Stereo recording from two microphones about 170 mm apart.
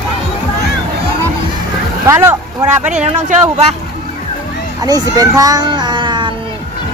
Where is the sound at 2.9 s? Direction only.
45° right (ahead or behind).